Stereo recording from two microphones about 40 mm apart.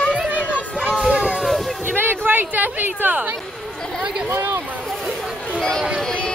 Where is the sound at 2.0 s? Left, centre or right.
Right.